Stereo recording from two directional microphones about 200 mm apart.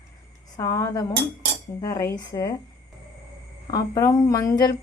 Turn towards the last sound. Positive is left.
turn(degrees=15)  # may be behind; listen again after turning